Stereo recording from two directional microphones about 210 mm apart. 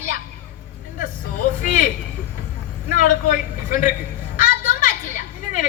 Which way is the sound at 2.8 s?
40° left (ahead or behind).